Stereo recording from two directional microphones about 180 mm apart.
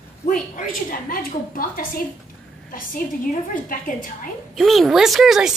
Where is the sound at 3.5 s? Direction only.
50° left (ahead or behind).